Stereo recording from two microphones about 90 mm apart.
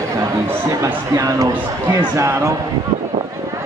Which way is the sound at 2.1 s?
30° right (ahead or behind).